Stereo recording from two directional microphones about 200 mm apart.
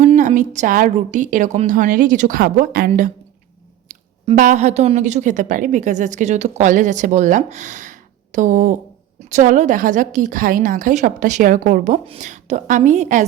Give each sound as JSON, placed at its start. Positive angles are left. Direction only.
{"t": 0.0, "sound": "a woman's voice", "side_deg": -35}